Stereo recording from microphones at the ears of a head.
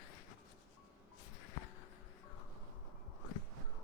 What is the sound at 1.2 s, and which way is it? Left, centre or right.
Music, left.